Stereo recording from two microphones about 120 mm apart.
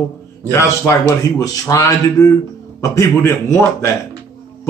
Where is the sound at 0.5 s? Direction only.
25° left (ahead or behind).